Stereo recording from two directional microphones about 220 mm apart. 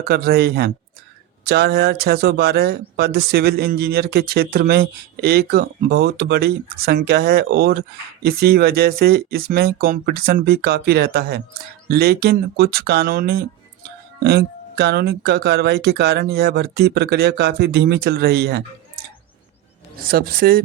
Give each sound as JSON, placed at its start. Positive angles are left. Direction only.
{"t": 0.0, "sound": "speech", "side_deg": -45}
{"t": 20.0, "sound": "speech", "side_deg": -40}